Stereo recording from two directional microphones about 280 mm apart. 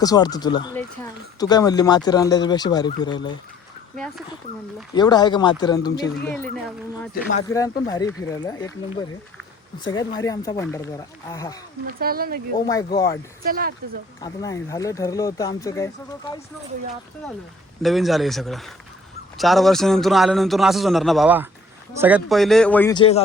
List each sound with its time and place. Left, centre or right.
0.0 s speech: centre
4.9 s speech: centre
6.2 s a man's voice: centre
7.1 s speech: left
7.9 s speech: centre
11.9 s speech: right
12.5 s speech: centre
13.4 s speech: right
14.2 s speech: centre
17.8 s a man's voice: centre